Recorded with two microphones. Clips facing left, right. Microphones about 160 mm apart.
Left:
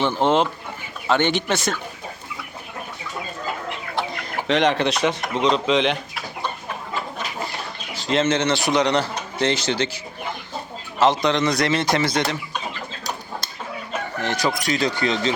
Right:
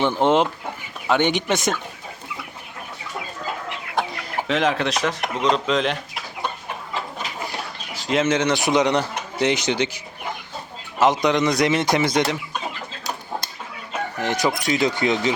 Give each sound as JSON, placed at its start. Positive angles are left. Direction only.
{"t": 0.0, "sound": "a man's voice", "side_deg": -15}
{"t": 4.1, "sound": "speech", "side_deg": -5}
{"t": 7.9, "sound": "a man's voice", "side_deg": -10}
{"t": 11.0, "sound": "a man's voice", "side_deg": -15}
{"t": 14.2, "sound": "speech", "side_deg": -20}